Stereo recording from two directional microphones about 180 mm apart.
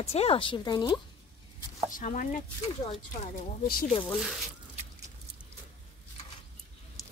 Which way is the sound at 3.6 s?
55° left (ahead or behind).